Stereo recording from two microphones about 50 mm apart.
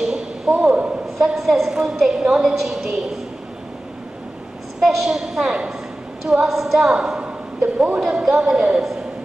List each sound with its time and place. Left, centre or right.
0.0 s a sound: centre
1.2 s a woman's voice: centre
4.7 s a woman's voice: centre
6.8 s a woman's voice: centre